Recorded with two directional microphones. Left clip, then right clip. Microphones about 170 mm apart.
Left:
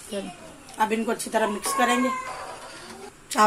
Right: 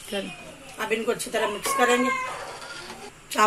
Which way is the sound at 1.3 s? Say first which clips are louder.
Left 4 dB; 55° left (ahead or behind).